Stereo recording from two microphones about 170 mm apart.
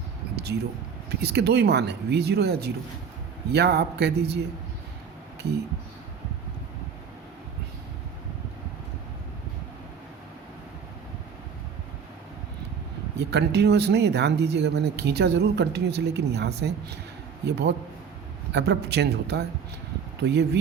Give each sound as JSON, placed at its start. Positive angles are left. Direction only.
{"t": 0.3, "sound": "a sound", "side_deg": -75}
{"t": 1.2, "sound": "speech", "side_deg": -75}
{"t": 13.1, "sound": "speech", "side_deg": -80}
{"t": 17.4, "sound": "a man's voice", "side_deg": -90}